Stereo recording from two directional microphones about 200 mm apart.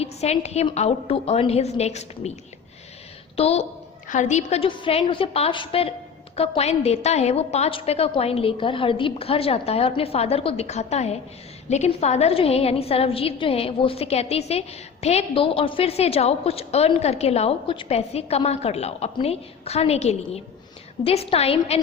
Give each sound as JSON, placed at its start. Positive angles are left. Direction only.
{"t": 0.0, "sound": "a woman's voice", "side_deg": 30}
{"t": 3.3, "sound": "a woman's voice", "side_deg": 30}